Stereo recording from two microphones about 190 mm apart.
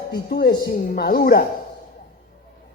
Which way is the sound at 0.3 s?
55° left (ahead or behind).